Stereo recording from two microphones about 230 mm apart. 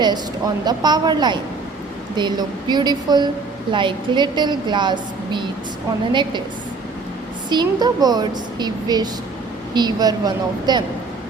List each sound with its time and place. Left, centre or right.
0.0 s a woman's voice: centre
7.5 s speech: centre